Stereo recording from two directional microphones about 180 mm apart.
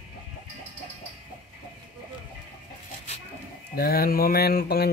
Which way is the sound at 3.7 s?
60° left (ahead or behind).